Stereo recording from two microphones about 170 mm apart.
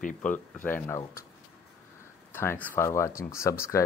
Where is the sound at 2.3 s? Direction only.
15° left (ahead or behind).